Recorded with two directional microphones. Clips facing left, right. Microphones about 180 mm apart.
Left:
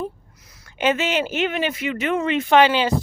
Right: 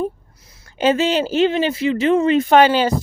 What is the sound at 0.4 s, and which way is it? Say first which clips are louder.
Speech: right 4 dB; 30° right (ahead or behind).